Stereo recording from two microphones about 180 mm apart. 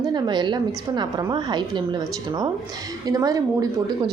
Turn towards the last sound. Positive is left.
turn(degrees=-20)  # may be behind; listen again after turning